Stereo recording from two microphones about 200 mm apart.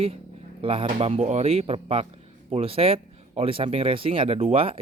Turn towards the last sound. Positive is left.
turn(degrees=-30)  # may be behind; listen again after turning